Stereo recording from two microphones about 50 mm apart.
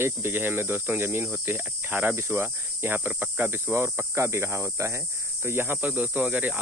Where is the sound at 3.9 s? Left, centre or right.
Right.